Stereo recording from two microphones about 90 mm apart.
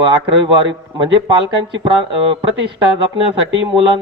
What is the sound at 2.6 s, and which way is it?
Speech, 65° right (ahead or behind).